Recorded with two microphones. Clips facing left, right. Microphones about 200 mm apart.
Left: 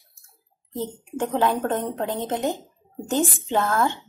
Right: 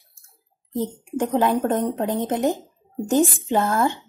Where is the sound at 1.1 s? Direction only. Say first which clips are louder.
Right 2 dB; 10° right (ahead or behind).